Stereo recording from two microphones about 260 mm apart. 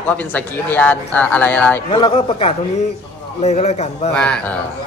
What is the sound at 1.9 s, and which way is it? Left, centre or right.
A man's voice, centre.